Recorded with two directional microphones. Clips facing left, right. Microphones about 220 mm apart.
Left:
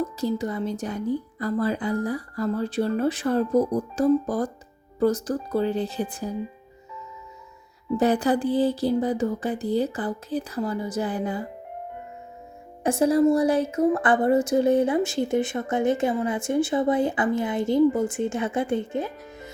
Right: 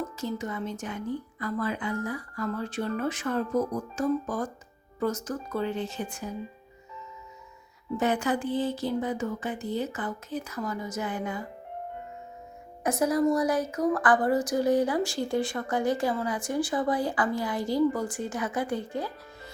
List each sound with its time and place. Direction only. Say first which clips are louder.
0.2 s speech: left 6 dB; 35° left (ahead or behind)
7.9 s speech: left 5 dB; 35° left (ahead or behind)
12.8 s a woman's voice: left 5 dB; 30° left (ahead or behind)